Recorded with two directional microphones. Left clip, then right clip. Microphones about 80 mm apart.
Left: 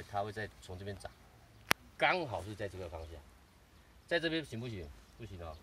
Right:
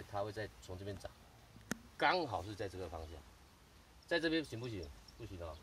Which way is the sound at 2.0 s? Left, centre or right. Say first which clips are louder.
Right 2 dB; right.